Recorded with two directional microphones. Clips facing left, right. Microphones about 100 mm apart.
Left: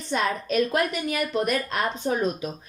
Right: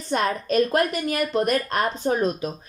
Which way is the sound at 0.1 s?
45° right (ahead or behind).